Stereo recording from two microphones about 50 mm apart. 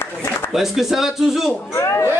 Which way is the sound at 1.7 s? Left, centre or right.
Left.